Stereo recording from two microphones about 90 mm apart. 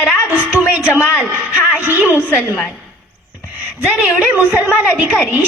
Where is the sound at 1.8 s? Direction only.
20° right (ahead or behind).